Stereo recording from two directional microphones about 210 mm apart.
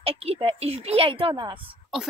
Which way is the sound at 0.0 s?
30° right (ahead or behind).